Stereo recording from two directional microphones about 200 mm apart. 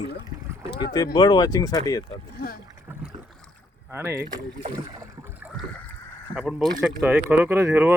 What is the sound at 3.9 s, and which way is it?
Speech, 10° right (ahead or behind).